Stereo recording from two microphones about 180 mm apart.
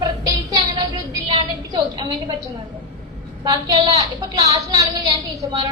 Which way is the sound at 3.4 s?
20° right (ahead or behind).